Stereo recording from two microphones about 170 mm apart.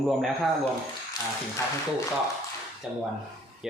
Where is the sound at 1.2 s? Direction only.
20° left (ahead or behind).